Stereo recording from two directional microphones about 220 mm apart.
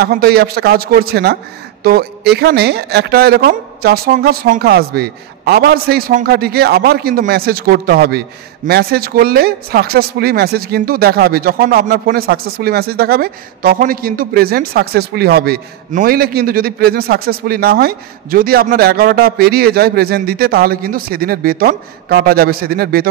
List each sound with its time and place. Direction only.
0.0 s speech: 45° right (ahead or behind)